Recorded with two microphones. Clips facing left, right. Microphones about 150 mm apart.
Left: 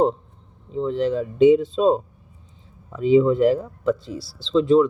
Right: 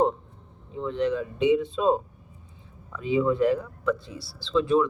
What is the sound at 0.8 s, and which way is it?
Speech, 30° left (ahead or behind).